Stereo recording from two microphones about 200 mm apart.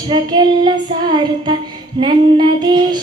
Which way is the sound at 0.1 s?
20° right (ahead or behind).